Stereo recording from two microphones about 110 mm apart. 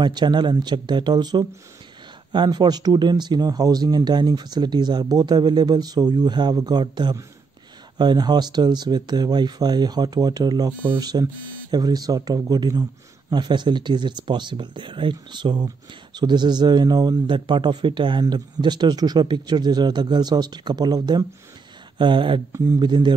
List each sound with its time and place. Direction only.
0.0 s speech: 40° right (ahead or behind)